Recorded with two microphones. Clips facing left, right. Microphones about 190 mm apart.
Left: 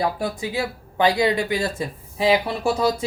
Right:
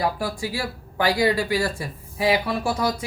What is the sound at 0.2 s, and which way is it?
Speech, 20° left (ahead or behind).